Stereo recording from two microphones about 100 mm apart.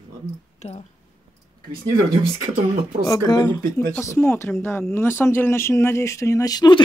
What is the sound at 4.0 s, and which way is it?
Speech, 25° left (ahead or behind).